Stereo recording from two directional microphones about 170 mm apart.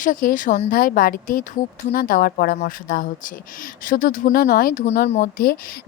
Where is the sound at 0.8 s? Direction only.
55° left (ahead or behind).